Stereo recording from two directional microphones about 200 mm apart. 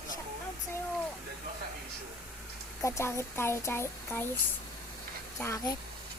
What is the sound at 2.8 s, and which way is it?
Speech, 15° left (ahead or behind).